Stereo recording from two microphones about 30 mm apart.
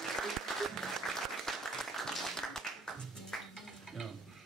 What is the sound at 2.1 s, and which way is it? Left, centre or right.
Music, centre.